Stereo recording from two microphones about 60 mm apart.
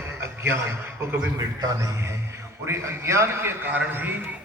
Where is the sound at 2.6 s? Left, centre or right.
Right.